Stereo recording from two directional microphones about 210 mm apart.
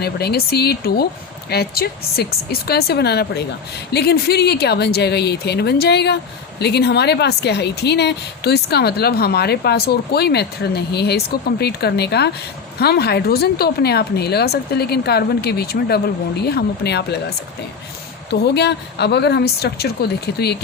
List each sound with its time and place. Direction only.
0.0 s speech: 50° left (ahead or behind)